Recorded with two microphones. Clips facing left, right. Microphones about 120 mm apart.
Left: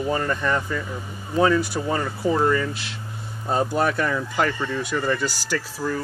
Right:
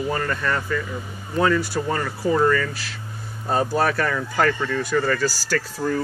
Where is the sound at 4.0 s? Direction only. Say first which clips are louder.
Right 1 dB; 20° left (ahead or behind).